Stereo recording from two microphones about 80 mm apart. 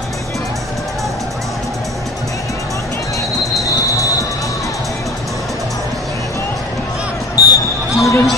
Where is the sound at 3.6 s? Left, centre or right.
Left.